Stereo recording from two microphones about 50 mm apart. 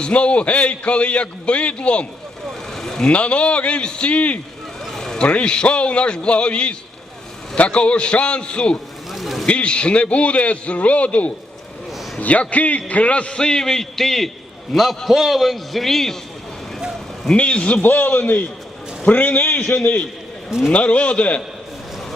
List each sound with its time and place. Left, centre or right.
0.0 s a man's voice: left
2.7 s vehicle: centre
3.0 s a man's voice: left
4.9 s a sound: centre
5.3 s a man's voice: centre
9.1 s a sound: centre
9.5 s a man's voice: left; by 16.1 s centre
17.3 s a man's voice: left
17.8 s a man's voice: left
19.6 s a man's voice: left